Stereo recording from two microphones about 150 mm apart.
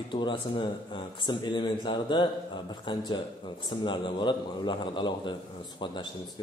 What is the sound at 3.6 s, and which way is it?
Speech, 30° left (ahead or behind).